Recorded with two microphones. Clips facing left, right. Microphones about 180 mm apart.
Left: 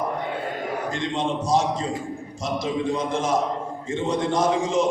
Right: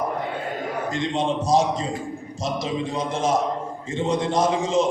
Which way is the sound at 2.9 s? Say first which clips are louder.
Right 2 dB; 20° right (ahead or behind).